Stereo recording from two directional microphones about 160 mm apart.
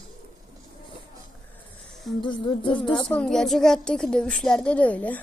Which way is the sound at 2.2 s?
30° left (ahead or behind).